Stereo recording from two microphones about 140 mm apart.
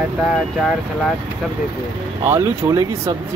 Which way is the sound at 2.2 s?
20° right (ahead or behind).